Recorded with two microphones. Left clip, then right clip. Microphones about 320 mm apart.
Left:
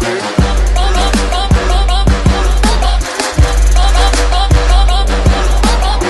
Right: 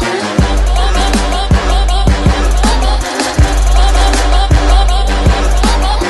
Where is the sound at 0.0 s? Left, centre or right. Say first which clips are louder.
Right 1 dB; centre.